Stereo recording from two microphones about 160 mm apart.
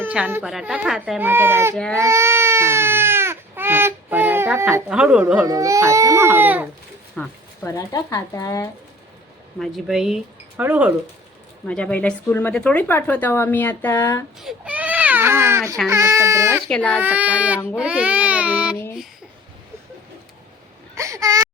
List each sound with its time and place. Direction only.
0.0 s speech: 10° right (ahead or behind)
1.7 s speech: 5° left (ahead or behind)
2.0 s baby cry: 15° right (ahead or behind)
4.9 s speech: 5° right (ahead or behind)
5.5 s speech: 20° right (ahead or behind)
7.2 s speech: 15° left (ahead or behind)
9.6 s speech: centre (ahead or behind)
11.7 s speech: 5° left (ahead or behind)
14.4 s baby cry: 5° right (ahead or behind)
15.9 s speech: 20° right (ahead or behind)
16.6 s speech: 5° left (ahead or behind)
17.0 s speech: 10° right (ahead or behind)
20.9 s baby cry: 20° right (ahead or behind)